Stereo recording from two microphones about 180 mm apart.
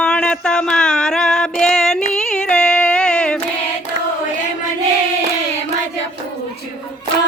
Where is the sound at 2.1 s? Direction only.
5° left (ahead or behind).